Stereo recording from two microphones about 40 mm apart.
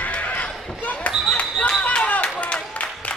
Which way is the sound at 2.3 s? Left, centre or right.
Left.